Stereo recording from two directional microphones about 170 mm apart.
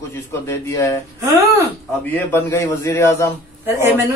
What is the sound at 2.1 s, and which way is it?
Speech, 15° left (ahead or behind).